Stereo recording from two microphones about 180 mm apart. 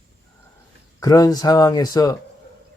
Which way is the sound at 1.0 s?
20° left (ahead or behind).